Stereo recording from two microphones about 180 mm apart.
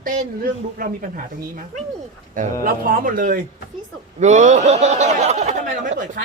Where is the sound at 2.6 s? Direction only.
50° right (ahead or behind).